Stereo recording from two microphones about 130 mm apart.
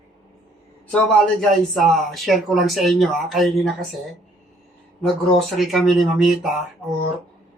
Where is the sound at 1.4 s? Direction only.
Centre (ahead or behind).